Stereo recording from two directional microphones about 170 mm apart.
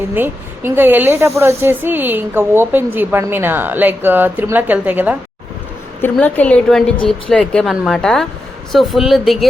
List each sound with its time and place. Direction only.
0.1 s speech: 10° right (ahead or behind)
6.0 s a woman's voice: 10° left (ahead or behind)